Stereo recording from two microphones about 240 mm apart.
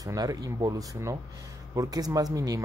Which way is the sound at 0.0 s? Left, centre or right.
Centre.